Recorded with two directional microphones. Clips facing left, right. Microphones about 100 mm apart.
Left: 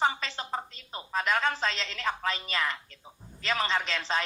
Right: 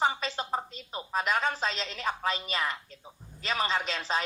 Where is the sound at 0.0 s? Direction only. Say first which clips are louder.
Even; 20° right (ahead or behind).